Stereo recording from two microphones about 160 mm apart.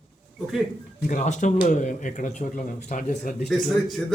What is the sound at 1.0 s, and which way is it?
Speech, 50° left (ahead or behind).